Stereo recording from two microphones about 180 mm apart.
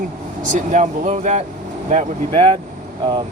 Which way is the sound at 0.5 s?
45° right (ahead or behind).